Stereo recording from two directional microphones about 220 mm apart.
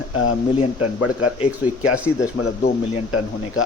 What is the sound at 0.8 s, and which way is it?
Speech, 90° left.